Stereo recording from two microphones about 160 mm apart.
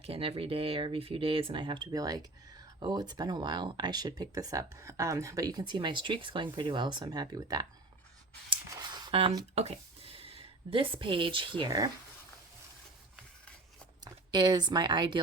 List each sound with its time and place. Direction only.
0.0 s speech: 35° right (ahead or behind)
8.7 s a sound: 25° right (ahead or behind)
9.6 s a woman's voice: 40° right (ahead or behind)
14.0 s speech: 25° right (ahead or behind)